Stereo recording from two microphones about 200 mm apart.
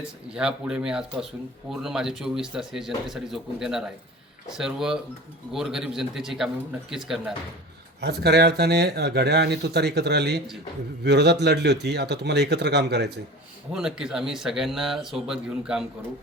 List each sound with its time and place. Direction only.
0.3 s speech: 5° right (ahead or behind)
8.0 s speech: 55° right (ahead or behind)
13.7 s speech: 5° right (ahead or behind)